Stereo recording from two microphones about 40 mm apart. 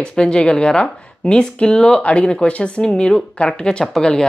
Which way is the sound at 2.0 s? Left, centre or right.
Left.